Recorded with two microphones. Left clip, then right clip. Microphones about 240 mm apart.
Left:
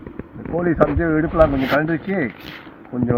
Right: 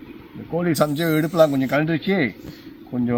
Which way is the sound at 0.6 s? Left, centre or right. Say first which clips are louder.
Left 3 dB; right.